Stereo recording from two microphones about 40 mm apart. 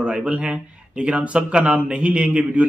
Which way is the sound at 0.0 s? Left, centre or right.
Right.